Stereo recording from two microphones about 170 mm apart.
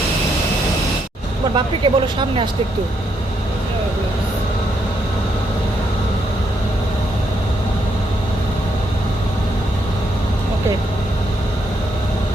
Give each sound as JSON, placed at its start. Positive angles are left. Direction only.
{"t": 1.5, "sound": "speech", "side_deg": -30}